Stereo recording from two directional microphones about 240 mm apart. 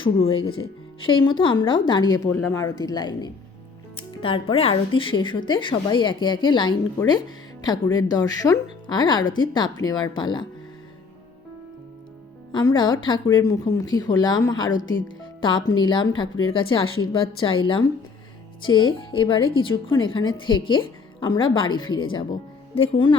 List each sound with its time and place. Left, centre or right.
0.0 s speech: left
0.3 s speech: left
1.0 s speech: left
12.5 s speech: centre